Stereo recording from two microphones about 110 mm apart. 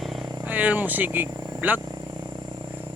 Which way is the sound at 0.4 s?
15° right (ahead or behind).